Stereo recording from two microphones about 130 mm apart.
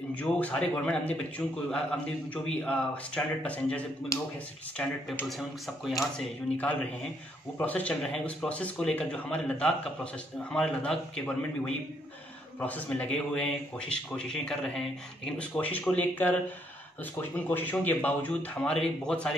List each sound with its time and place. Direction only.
0.1 s speech: 10° left (ahead or behind)
4.1 s speech: 25° left (ahead or behind)
4.8 s speech: 10° left (ahead or behind)
5.4 s a man's voice: centre (ahead or behind)
7.5 s a man's voice: 10° left (ahead or behind)